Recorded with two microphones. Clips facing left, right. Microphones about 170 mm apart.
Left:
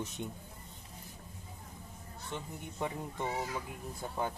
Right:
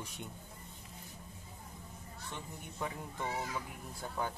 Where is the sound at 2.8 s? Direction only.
20° left (ahead or behind).